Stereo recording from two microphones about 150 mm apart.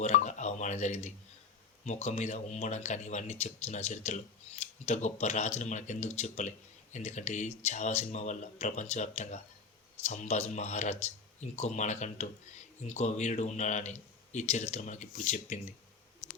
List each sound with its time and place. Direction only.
0.0 s telephone dialing: 55° left (ahead or behind)
1.8 s speech: 50° left (ahead or behind)